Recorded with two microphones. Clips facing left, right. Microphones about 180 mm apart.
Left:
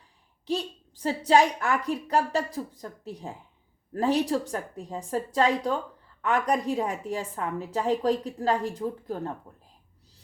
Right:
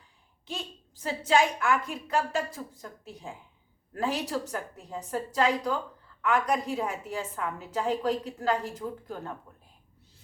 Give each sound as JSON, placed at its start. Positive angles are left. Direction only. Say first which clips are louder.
{"t": 0.4, "sound": "a woman's voice", "louder": "left 9 dB", "side_deg": 35}